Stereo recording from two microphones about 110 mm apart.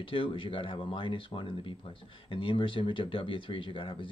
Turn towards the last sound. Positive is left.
turn(degrees=50)  # may be behind; listen again after turning